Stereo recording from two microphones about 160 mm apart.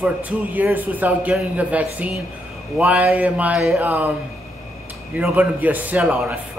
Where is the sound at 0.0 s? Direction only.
10° right (ahead or behind).